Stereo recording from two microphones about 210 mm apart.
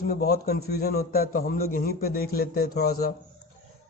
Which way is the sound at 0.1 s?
50° left (ahead or behind).